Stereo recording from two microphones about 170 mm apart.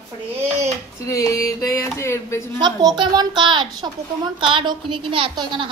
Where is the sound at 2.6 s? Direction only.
25° right (ahead or behind).